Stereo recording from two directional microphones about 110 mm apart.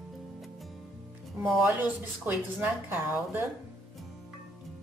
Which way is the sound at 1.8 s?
20° right (ahead or behind).